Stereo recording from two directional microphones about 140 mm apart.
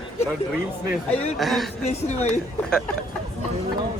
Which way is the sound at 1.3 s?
Centre (ahead or behind).